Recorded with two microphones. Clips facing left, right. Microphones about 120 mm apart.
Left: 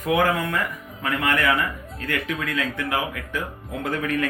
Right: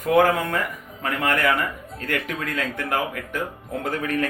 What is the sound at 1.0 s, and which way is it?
Speech, 40° right (ahead or behind).